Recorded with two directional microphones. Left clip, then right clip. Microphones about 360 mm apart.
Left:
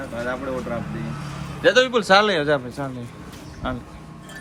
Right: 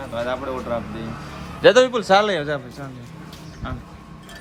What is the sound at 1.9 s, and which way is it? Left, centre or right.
A man's voice, centre.